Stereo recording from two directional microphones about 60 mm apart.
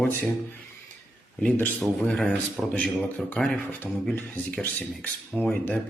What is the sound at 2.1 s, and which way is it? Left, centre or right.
Speech, centre.